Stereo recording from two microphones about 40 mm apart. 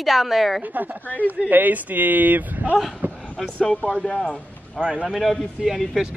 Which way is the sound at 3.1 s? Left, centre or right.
Left.